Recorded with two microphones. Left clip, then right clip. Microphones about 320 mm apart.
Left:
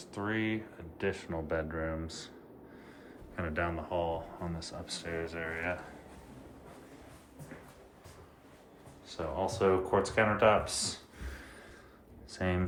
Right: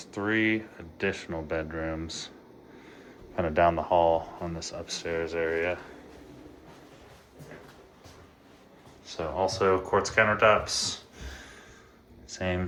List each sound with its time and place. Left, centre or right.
0.2 s speech: centre
3.3 s speech: centre
9.1 s speech: centre
12.3 s speech: centre